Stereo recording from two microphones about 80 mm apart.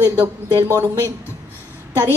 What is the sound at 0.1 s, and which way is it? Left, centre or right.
Speech, right.